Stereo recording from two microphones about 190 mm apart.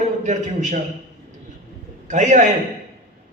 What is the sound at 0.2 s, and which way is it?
Speech, 40° right (ahead or behind).